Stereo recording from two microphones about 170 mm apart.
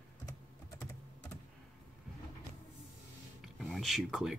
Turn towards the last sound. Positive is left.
turn(degrees=0)  # may be behind; listen again after turning